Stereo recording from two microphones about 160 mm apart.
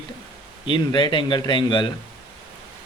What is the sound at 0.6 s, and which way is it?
A man's voice, 30° left (ahead or behind).